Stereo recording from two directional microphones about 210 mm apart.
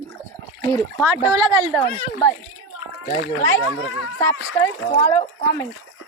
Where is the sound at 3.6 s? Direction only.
70° left (ahead or behind).